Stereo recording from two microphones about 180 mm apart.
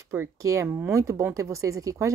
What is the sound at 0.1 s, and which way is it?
Speech, 15° right (ahead or behind).